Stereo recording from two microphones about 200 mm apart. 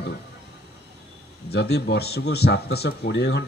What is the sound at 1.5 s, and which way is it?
Speech, 55° left (ahead or behind).